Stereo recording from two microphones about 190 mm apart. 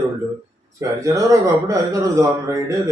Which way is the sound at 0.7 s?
15° right (ahead or behind).